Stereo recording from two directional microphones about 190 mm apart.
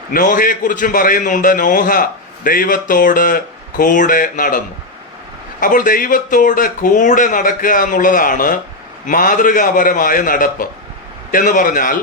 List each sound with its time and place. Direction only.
0.1 s a man's voice: 45° left (ahead or behind)